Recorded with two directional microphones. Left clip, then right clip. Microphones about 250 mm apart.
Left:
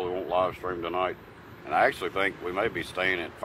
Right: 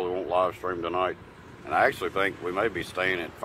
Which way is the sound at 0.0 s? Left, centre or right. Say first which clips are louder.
Right 1 dB; centre.